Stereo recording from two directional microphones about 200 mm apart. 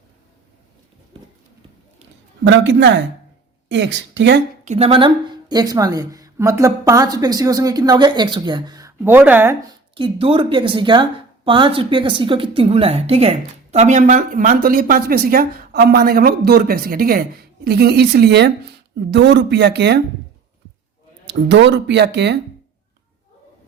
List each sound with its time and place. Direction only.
2.4 s speech: 65° right (ahead or behind)
4.6 s a woman's voice: 30° right (ahead or behind); by 9.6 s 10° right (ahead or behind)
9.9 s a woman's voice: 25° right (ahead or behind); by 20.0 s 55° right (ahead or behind)
21.2 s speech: 60° right (ahead or behind)